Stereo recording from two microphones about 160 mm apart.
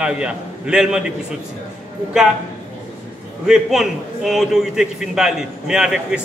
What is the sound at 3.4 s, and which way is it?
A man's voice, centre (ahead or behind).